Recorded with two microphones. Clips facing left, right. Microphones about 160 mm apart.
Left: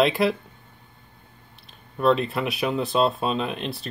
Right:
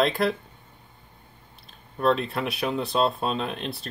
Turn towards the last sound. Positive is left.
turn(degrees=0)  # may be behind; listen again after turning